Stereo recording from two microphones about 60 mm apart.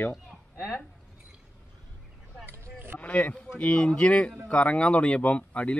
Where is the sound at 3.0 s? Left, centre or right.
Centre.